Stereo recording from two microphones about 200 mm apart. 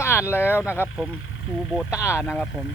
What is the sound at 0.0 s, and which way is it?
Speech, 10° left (ahead or behind).